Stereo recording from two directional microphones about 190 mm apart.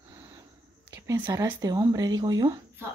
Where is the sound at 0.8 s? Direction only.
15° right (ahead or behind).